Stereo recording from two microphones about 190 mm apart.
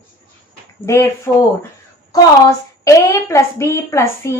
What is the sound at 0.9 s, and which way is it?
Speech, 15° left (ahead or behind).